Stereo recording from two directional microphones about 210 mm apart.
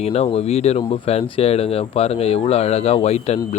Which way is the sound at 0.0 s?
30° left (ahead or behind).